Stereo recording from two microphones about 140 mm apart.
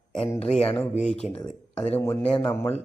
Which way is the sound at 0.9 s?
60° left (ahead or behind).